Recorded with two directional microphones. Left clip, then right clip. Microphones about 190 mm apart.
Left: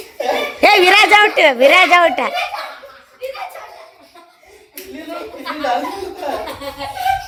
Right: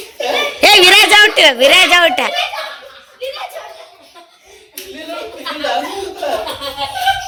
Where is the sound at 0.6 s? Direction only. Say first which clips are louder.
Right 3 dB; 10° left (ahead or behind).